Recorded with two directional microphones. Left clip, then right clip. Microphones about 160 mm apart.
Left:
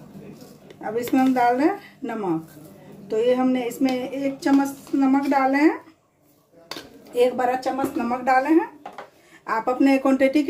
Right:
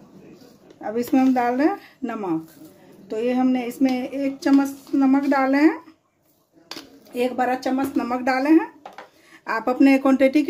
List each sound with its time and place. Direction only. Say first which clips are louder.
0.7 s speech: right 1 dB; 40° right (ahead or behind)
7.2 s a woman's voice: left 2 dB; 45° right (ahead or behind)
8.1 s speech: even; 85° right
9.5 s speech: right 2 dB; 55° right (ahead or behind); by 10.4 s 30° right (ahead or behind)